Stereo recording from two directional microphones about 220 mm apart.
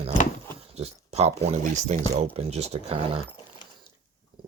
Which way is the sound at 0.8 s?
30° right (ahead or behind).